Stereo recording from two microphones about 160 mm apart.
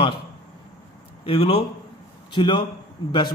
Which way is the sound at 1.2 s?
35° left (ahead or behind).